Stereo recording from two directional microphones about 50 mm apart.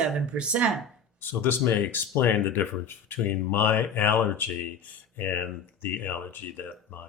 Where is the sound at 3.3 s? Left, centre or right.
Left.